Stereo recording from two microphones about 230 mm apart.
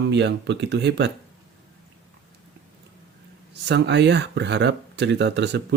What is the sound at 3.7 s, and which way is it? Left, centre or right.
Speech, right.